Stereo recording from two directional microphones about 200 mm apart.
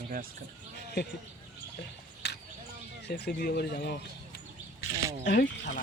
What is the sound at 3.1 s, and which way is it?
Speech, 50° left (ahead or behind).